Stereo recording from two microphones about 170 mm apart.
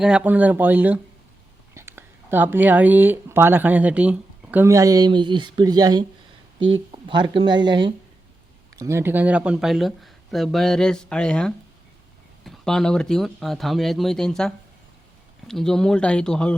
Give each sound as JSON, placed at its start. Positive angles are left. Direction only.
{"t": 0.0, "sound": "speech", "side_deg": -5}